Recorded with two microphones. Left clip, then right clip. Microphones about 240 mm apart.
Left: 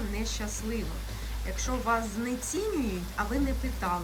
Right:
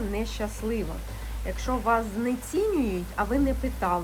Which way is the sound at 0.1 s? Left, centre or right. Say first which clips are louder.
Right 4 dB; centre.